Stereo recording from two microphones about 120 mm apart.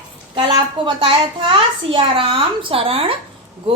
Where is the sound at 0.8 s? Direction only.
45° right (ahead or behind).